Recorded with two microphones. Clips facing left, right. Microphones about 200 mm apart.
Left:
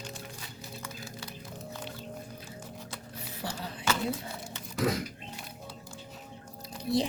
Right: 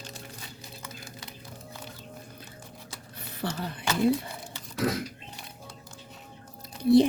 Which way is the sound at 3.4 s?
60° right (ahead or behind).